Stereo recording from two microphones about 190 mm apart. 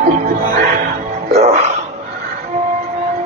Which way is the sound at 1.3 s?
35° right (ahead or behind).